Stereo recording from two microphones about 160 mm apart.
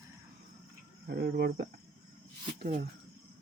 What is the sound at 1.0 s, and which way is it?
Speech, 75° right (ahead or behind).